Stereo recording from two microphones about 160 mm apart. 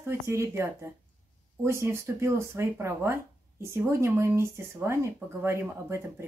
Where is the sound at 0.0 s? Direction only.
15° right (ahead or behind).